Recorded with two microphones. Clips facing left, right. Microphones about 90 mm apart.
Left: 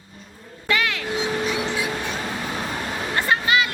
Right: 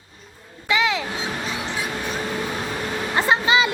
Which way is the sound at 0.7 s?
20° right (ahead or behind).